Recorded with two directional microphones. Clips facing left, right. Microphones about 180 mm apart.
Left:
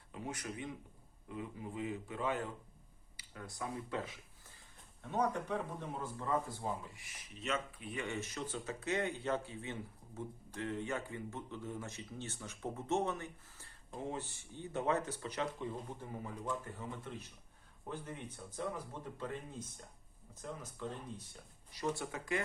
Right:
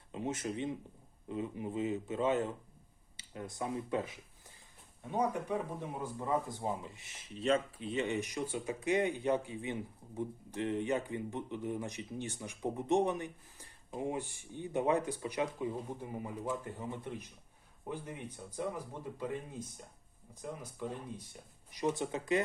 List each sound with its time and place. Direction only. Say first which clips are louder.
0.1 s a man's voice: right 6 dB; 25° right (ahead or behind)
5.0 s speech: right 2 dB; 10° right (ahead or behind)